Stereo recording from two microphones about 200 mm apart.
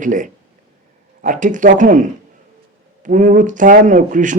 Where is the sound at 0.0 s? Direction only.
40° right (ahead or behind).